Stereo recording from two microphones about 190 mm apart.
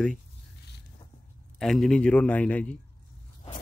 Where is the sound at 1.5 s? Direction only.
Centre (ahead or behind).